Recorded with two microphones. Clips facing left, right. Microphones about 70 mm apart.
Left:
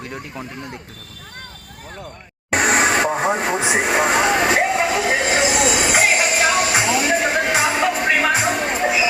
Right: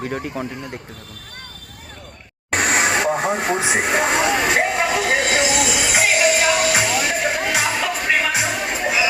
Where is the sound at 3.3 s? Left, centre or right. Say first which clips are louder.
Left 1 dB; centre.